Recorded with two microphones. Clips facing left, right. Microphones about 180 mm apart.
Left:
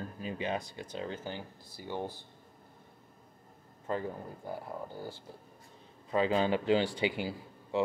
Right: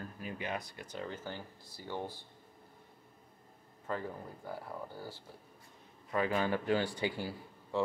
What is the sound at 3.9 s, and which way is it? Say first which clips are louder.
Speech: left 4 dB; 20° left (ahead or behind).